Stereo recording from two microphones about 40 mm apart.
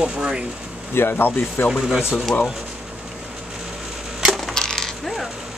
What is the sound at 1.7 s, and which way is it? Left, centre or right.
Speech, centre.